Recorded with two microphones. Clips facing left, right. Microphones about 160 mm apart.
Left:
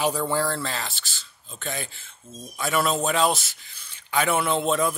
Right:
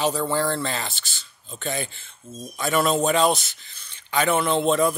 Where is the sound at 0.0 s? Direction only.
10° left (ahead or behind).